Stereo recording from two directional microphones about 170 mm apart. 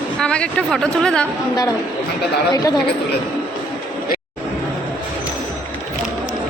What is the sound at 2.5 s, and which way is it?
Speech, 20° left (ahead or behind).